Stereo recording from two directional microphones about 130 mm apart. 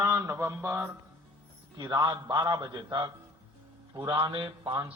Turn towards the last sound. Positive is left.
turn(degrees=-30)  # may be behind; listen again after turning